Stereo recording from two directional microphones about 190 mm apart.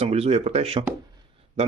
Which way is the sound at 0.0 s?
35° right (ahead or behind).